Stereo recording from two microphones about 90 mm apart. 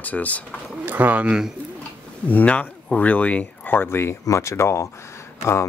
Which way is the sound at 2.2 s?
15° left (ahead or behind).